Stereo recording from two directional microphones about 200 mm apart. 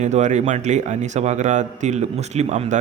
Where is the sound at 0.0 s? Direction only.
35° right (ahead or behind).